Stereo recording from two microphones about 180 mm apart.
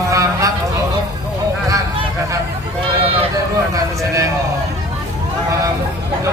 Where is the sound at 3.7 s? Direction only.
20° right (ahead or behind).